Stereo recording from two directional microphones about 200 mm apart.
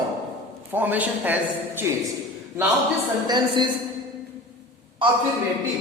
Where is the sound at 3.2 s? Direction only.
20° right (ahead or behind).